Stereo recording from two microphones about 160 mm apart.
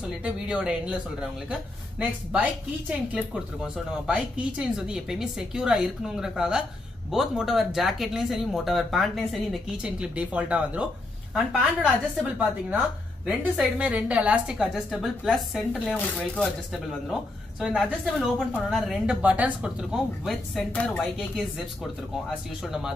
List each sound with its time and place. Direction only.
0.0 s a woman's voice: 5° right (ahead or behind)
22.6 s a woman's voice: 5° right (ahead or behind)